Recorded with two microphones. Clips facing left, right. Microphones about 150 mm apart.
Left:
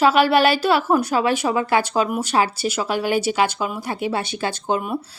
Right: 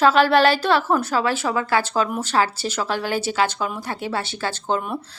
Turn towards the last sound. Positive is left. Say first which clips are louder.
# left 1 dB
turn(degrees=10)  # may be behind; listen again after turning